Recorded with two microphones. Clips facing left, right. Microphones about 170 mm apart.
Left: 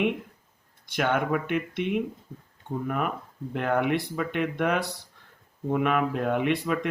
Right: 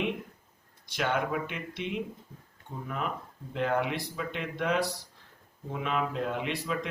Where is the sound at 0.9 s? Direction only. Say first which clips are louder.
Left 4 dB; 55° left (ahead or behind).